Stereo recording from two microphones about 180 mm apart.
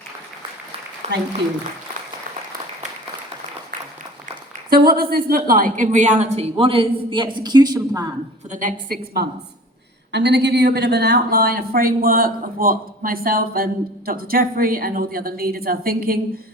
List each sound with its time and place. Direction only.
1.0 s speech: 40° right (ahead or behind)
4.7 s a woman's voice: 55° right (ahead or behind); by 8.1 s 20° right (ahead or behind)
8.4 s a woman's voice: 45° right (ahead or behind)
10.1 s a woman's voice: 75° right (ahead or behind); by 16.4 s 55° right (ahead or behind)